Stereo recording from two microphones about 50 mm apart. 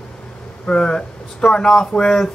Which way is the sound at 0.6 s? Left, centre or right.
Centre.